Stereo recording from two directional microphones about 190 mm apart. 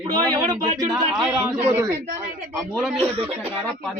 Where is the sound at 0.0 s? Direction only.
20° right (ahead or behind).